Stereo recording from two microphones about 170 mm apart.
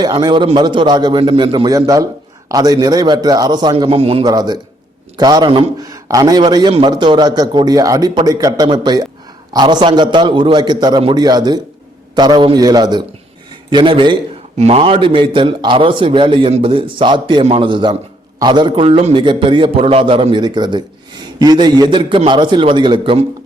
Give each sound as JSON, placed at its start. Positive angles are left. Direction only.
{"t": 0.0, "sound": "a man's voice", "side_deg": -25}
{"t": 4.2, "sound": "a man's voice", "side_deg": -25}